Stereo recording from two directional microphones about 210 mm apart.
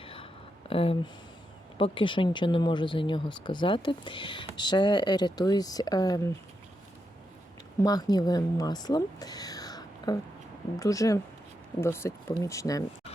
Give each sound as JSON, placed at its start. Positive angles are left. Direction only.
{"t": 0.0, "sound": "a sound", "side_deg": 25}
{"t": 0.7, "sound": "speech", "side_deg": 25}
{"t": 7.8, "sound": "speech", "side_deg": 15}